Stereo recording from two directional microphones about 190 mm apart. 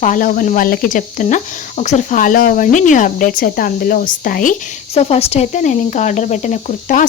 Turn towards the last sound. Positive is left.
turn(degrees=40)  # may be behind; listen again after turning